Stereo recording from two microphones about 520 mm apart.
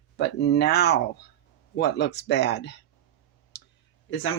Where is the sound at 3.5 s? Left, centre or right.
Centre.